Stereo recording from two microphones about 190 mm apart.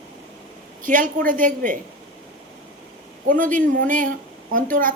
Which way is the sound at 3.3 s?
45° right (ahead or behind).